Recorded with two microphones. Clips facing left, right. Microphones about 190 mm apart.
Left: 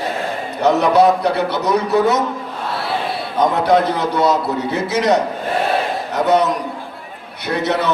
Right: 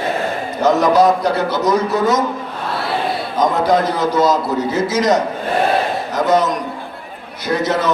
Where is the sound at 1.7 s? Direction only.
Centre (ahead or behind).